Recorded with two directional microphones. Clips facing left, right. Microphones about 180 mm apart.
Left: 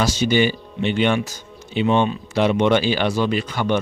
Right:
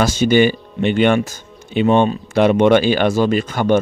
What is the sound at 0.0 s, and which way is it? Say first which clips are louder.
Speech: right 5 dB; 50° right (ahead or behind).